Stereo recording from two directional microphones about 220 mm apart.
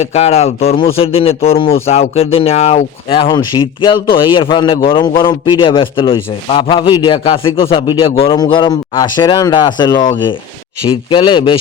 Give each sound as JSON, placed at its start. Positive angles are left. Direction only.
{"t": 0.0, "sound": "speech", "side_deg": 30}